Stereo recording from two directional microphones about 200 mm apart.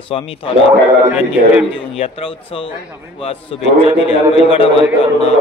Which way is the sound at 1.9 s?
30° left (ahead or behind).